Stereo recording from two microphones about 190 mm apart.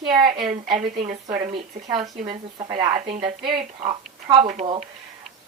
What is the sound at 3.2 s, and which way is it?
A woman's voice, 25° right (ahead or behind).